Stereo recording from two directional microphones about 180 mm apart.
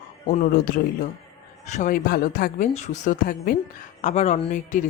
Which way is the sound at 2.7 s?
40° left (ahead or behind).